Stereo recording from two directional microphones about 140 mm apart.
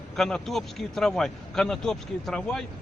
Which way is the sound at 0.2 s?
5° left (ahead or behind).